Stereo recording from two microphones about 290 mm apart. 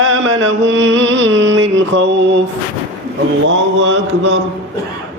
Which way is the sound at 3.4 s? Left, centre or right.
Right.